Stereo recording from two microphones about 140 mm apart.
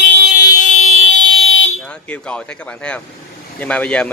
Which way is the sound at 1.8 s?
10° left (ahead or behind).